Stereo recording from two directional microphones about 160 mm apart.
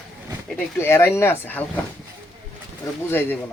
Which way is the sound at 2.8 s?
15° left (ahead or behind).